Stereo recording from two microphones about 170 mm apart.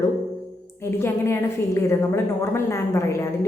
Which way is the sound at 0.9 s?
15° left (ahead or behind).